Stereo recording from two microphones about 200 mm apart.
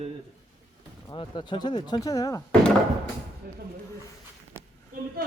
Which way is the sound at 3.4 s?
50° right (ahead or behind).